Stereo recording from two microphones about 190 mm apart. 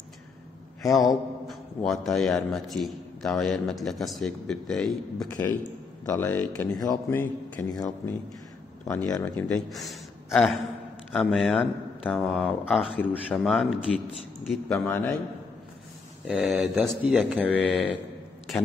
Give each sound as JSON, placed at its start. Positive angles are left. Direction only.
{"t": 0.9, "sound": "a man's voice", "side_deg": 0}
{"t": 8.8, "sound": "a man's voice", "side_deg": 15}
{"t": 16.3, "sound": "a man's voice", "side_deg": -5}